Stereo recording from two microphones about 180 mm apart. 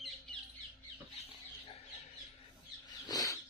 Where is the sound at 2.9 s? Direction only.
20° left (ahead or behind).